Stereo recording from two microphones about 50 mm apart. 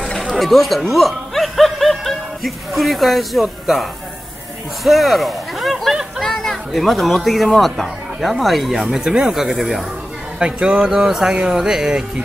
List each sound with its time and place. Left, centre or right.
0.3 s speech: centre
6.2 s speech: centre
10.4 s speech: right